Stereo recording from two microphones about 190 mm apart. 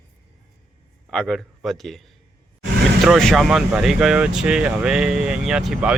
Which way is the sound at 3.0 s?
Centre (ahead or behind).